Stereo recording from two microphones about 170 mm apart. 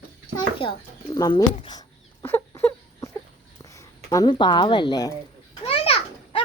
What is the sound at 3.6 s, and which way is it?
Speech, 20° left (ahead or behind).